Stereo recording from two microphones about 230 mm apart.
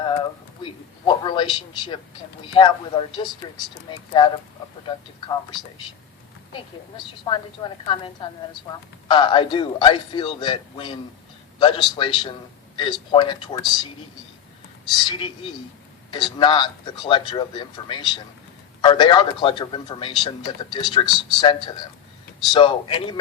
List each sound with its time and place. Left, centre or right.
0.0 s a man's voice: left
14.9 s a man's voice: centre